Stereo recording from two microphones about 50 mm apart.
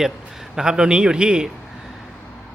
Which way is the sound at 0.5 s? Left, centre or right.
Centre.